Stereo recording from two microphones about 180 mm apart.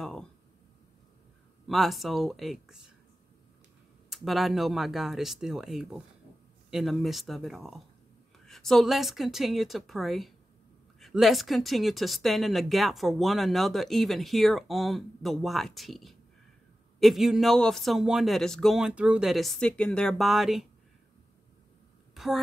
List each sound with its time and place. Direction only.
0.0 s speech: centre (ahead or behind)
1.7 s speech: centre (ahead or behind)
4.1 s speech: centre (ahead or behind)
22.1 s a sound: centre (ahead or behind)